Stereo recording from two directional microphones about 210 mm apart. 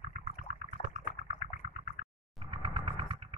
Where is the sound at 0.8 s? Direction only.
35° left (ahead or behind).